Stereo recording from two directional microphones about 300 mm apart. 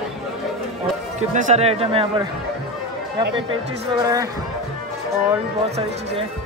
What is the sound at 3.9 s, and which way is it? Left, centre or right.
Speech, centre.